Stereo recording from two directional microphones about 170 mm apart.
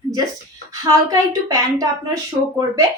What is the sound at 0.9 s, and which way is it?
Speech, 20° right (ahead or behind).